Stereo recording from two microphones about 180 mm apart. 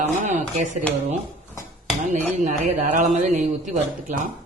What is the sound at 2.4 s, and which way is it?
A man's voice, 45° right (ahead or behind).